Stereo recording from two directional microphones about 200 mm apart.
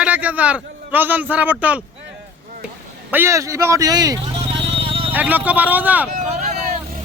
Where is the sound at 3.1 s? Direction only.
10° right (ahead or behind).